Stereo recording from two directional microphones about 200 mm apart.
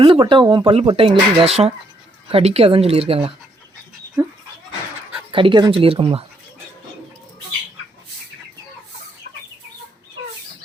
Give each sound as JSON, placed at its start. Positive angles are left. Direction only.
{"t": 0.0, "sound": "speech", "side_deg": -25}
{"t": 5.3, "sound": "speech", "side_deg": -25}